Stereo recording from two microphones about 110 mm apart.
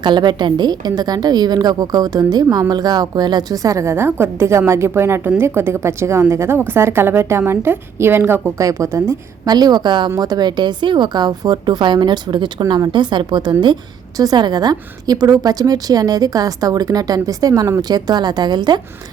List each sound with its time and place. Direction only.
0.0 s a woman's voice: 40° right (ahead or behind)